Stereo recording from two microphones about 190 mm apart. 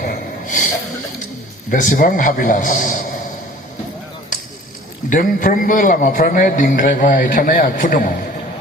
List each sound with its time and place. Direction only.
0.0 s snort: 45° left (ahead or behind)
1.7 s a man's voice: 45° left (ahead or behind)
5.0 s a man's voice: 45° left (ahead or behind)